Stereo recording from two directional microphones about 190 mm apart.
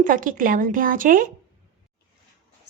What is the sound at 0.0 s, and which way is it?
A woman's voice, 45° right (ahead or behind).